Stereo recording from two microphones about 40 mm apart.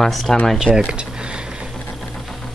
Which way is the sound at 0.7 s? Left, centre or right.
Left.